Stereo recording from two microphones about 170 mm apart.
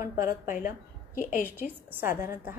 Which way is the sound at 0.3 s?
50° left (ahead or behind).